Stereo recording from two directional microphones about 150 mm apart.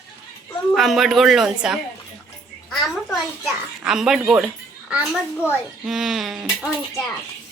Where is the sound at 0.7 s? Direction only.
Centre (ahead or behind).